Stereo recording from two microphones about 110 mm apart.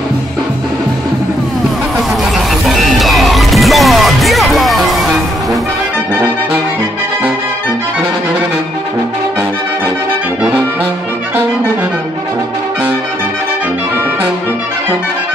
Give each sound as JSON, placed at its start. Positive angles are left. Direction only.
{"t": 2.0, "sound": "music", "side_deg": 0}